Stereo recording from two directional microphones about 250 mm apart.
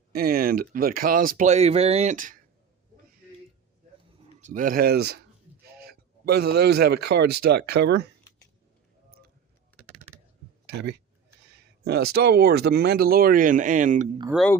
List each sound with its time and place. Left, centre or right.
0.1 s speech: right
4.4 s speech: right
11.9 s speech: right
14.3 s speech: centre